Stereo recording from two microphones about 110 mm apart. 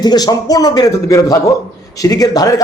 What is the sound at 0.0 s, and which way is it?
Speech, 35° left (ahead or behind).